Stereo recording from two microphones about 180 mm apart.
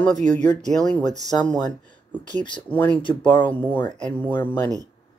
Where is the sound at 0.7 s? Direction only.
5° left (ahead or behind).